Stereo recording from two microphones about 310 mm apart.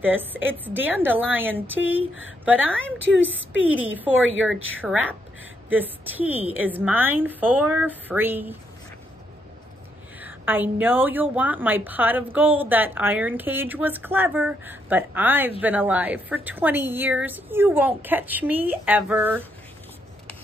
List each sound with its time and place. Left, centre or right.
0.0 s a woman's voice: centre
2.8 s a woman's voice: left
4.1 s a woman's voice: right
5.7 s a woman's voice: centre
10.2 s a woman's voice: centre